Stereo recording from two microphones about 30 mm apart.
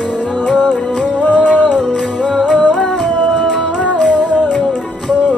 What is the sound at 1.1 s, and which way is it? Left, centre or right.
Music, left.